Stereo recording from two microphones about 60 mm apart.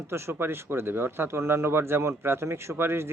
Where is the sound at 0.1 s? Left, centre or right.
Right.